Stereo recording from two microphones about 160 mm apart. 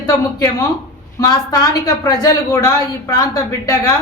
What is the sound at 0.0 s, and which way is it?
Speech, 20° left (ahead or behind).